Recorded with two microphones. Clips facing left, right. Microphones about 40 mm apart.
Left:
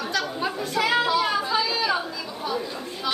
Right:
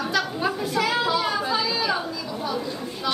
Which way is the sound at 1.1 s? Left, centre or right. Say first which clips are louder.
Left 1 dB; centre.